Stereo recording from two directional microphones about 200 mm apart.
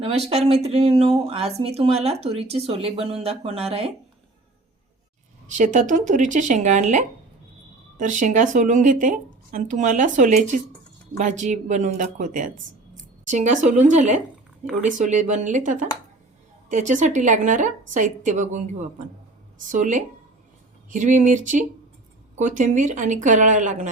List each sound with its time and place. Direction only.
0.0 s speech: 30° right (ahead or behind)
5.5 s speech: 40° right (ahead or behind)